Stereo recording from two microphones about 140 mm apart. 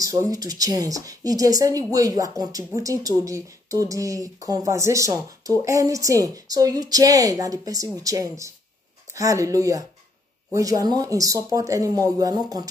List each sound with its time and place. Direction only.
0.0 s speech: 25° right (ahead or behind)